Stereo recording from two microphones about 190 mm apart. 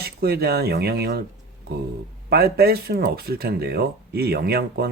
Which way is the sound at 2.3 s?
55° right (ahead or behind).